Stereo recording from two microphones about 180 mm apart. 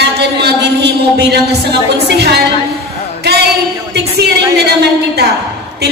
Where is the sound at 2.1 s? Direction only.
65° right (ahead or behind).